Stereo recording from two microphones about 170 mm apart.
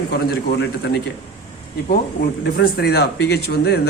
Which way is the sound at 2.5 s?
70° left (ahead or behind).